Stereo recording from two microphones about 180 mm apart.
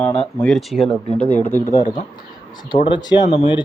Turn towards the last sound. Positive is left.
turn(degrees=30)  # may be behind; listen again after turning